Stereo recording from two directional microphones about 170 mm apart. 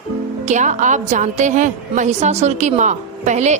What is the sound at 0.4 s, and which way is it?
A woman's voice, 45° right (ahead or behind).